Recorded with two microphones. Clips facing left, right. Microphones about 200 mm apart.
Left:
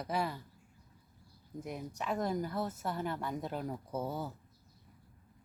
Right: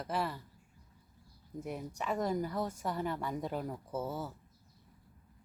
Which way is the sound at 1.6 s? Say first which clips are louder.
Right 1 dB; 10° right (ahead or behind).